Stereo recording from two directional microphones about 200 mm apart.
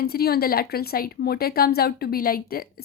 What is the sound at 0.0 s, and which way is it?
Speech, 50° left (ahead or behind).